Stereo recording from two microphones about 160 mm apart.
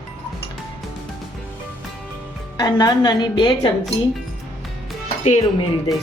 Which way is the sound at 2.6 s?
25° left (ahead or behind).